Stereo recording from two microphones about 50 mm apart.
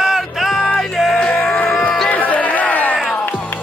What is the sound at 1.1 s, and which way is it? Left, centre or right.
Music, centre.